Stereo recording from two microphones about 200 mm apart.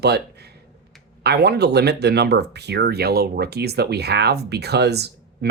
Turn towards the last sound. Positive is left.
turn(degrees=-55)  # may be behind; listen again after turning